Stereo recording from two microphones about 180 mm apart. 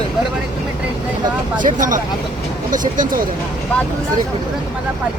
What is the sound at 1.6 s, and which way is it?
Speech, 45° right (ahead or behind).